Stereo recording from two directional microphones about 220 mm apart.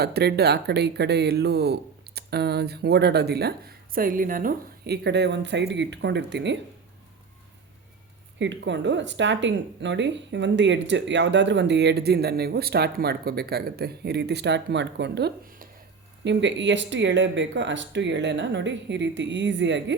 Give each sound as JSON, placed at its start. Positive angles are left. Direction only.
{"t": 0.0, "sound": "speech", "side_deg": -45}
{"t": 8.4, "sound": "speech", "side_deg": -55}
{"t": 16.2, "sound": "speech", "side_deg": -55}